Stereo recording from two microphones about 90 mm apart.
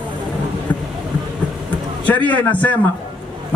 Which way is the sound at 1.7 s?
15° left (ahead or behind).